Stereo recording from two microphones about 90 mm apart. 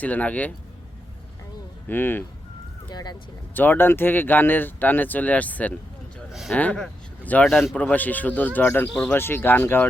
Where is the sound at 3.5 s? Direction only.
20° left (ahead or behind).